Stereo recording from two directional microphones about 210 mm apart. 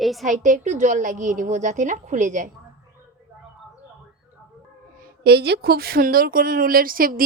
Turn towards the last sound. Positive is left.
turn(degrees=-45)  # may be behind; listen again after turning